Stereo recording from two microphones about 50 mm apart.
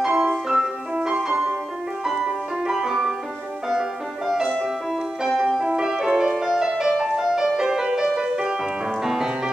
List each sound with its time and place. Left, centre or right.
0.0 s music: centre
2.2 s piano: centre
5.3 s music: centre
5.6 s piano: centre
6.3 s music: centre